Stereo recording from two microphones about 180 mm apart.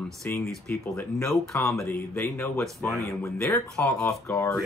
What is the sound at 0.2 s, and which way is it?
Speech, 5° left (ahead or behind).